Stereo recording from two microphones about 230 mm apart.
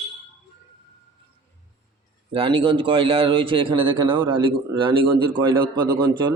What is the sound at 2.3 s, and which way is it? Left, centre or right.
A man's voice, right.